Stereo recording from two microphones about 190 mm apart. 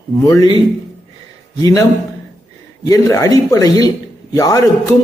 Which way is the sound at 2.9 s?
15° left (ahead or behind).